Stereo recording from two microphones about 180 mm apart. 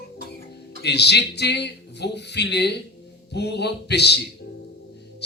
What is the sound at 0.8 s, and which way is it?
Speech, 70° left (ahead or behind).